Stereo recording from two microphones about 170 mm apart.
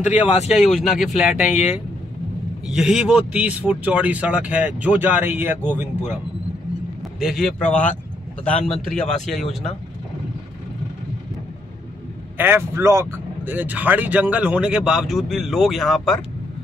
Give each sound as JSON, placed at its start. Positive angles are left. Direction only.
{"t": 0.0, "sound": "speech", "side_deg": 40}
{"t": 0.7, "sound": "speech", "side_deg": 0}
{"t": 1.5, "sound": "speech", "side_deg": 40}
{"t": 2.6, "sound": "speech", "side_deg": -5}
{"t": 7.0, "sound": "speech", "side_deg": 0}
{"t": 12.4, "sound": "speech", "side_deg": -15}